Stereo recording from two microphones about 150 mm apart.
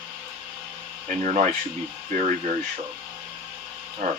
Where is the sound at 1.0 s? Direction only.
50° right (ahead or behind).